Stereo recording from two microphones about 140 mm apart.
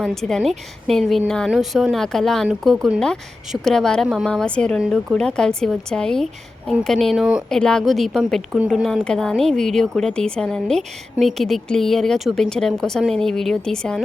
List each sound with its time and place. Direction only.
0.0 s a woman's voice: 5° left (ahead or behind)